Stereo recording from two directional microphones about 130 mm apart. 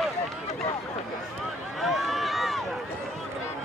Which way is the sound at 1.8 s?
Centre (ahead or behind).